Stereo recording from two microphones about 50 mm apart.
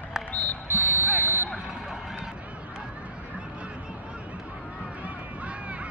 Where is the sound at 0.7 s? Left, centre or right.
Right.